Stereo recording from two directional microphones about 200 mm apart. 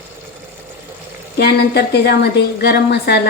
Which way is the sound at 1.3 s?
55° left (ahead or behind).